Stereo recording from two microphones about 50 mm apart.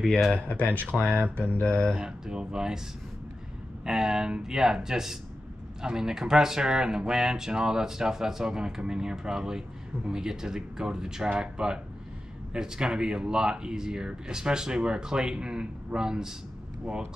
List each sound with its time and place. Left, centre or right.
0.3 s speech: left
0.9 s speech: centre
1.6 s speech: left
2.0 s speech: centre
3.8 s speech: centre